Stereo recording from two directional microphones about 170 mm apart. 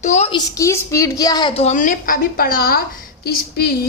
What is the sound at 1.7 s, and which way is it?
A woman's voice, 55° left (ahead or behind).